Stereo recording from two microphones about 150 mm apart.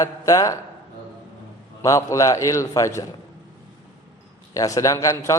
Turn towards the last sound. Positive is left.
turn(degrees=20)  # may be behind; listen again after turning